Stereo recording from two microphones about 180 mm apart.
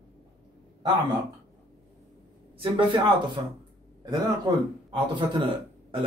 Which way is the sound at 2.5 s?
30° right (ahead or behind).